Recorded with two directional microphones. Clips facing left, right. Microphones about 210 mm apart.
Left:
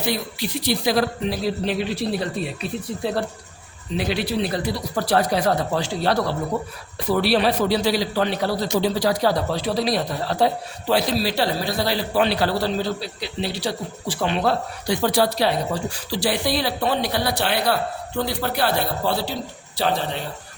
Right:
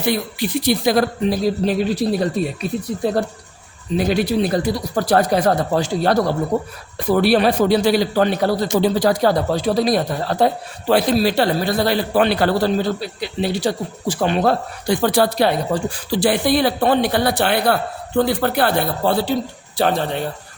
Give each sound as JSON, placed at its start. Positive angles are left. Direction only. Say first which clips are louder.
{"t": 0.1, "sound": "a man's voice", "louder": "right 9 dB", "side_deg": -50}